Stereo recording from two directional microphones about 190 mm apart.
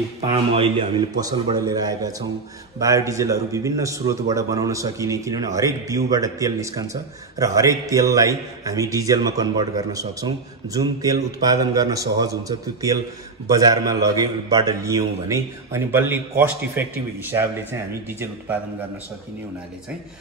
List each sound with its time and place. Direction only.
0.6 s a man's voice: 25° right (ahead or behind)